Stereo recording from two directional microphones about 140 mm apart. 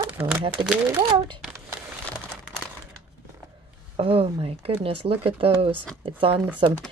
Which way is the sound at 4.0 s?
45° right (ahead or behind).